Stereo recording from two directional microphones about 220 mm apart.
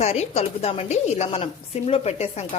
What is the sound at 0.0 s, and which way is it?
Speech, 30° left (ahead or behind).